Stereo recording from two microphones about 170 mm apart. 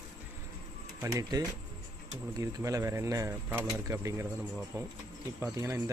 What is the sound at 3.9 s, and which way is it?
Speech, 15° right (ahead or behind).